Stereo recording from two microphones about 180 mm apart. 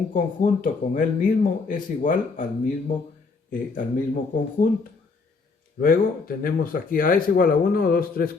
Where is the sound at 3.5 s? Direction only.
50° left (ahead or behind).